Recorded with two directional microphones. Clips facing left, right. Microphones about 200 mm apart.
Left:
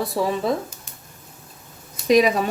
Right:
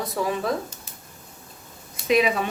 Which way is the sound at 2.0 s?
40° left (ahead or behind).